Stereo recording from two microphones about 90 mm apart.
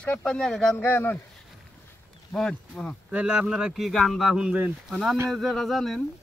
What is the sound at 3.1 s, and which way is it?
Speech, 15° right (ahead or behind).